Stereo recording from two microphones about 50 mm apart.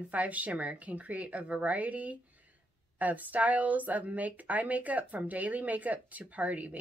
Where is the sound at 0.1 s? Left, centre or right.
Right.